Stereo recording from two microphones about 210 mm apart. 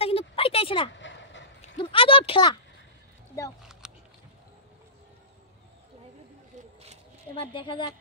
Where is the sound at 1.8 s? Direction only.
25° left (ahead or behind).